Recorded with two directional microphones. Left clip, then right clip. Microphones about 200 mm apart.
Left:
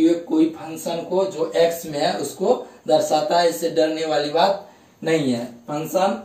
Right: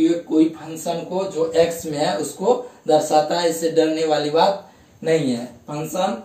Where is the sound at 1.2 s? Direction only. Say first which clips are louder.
Right 2 dB; 20° right (ahead or behind).